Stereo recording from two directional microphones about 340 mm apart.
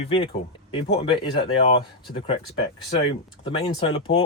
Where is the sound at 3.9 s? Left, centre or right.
Centre.